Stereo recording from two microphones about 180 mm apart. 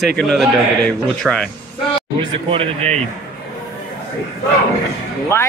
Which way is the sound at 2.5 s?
35° right (ahead or behind).